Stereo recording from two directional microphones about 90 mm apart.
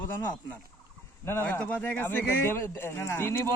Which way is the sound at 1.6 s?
15° left (ahead or behind).